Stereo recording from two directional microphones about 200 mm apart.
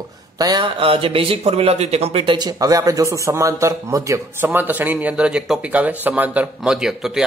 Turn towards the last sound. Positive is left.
turn(degrees=0)  # may be behind; listen again after turning